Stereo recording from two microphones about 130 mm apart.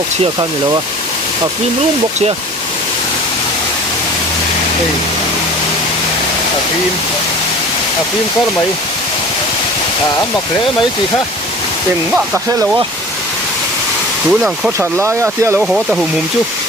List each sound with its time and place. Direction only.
14.3 s speech: 5° right (ahead or behind)
14.8 s speech: 20° right (ahead or behind)
15.6 s speech: centre (ahead or behind)